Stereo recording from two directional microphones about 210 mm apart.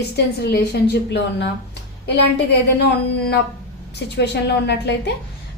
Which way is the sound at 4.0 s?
55° left (ahead or behind).